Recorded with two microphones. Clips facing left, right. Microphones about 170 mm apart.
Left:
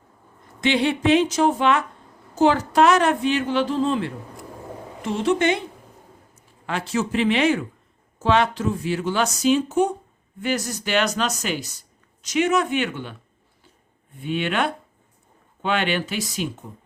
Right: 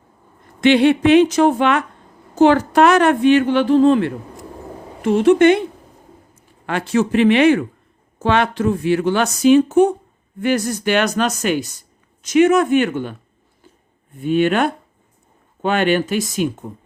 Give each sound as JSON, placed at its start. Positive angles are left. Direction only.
{"t": 0.6, "sound": "a woman's voice", "side_deg": -60}
{"t": 6.7, "sound": "a woman's voice", "side_deg": -60}
{"t": 14.2, "sound": "speech", "side_deg": -45}